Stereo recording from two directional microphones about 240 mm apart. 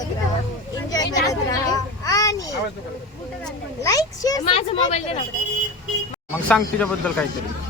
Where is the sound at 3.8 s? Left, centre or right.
Centre.